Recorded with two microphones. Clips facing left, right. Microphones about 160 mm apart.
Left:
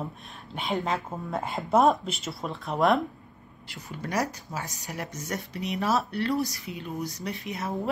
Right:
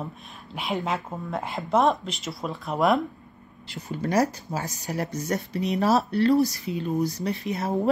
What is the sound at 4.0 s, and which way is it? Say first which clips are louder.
Speech: right 6 dB; 40° right (ahead or behind).